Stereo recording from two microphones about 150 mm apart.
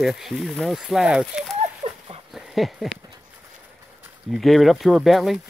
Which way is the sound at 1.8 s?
45° right (ahead or behind).